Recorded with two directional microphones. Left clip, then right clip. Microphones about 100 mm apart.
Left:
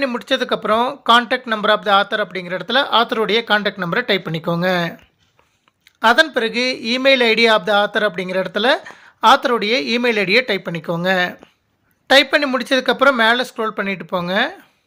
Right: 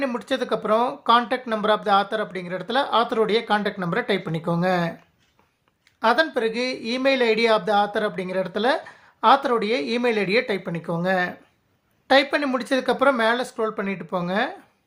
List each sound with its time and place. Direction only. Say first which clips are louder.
0.0 s speech: left 6 dB; 20° left (ahead or behind)
6.0 s speech: left 6 dB; 30° left (ahead or behind)